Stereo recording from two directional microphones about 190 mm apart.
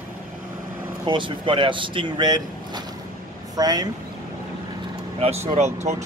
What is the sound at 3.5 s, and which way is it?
Speech, 20° right (ahead or behind).